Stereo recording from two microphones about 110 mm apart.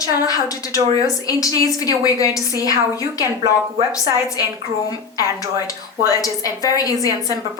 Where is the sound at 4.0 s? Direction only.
35° left (ahead or behind).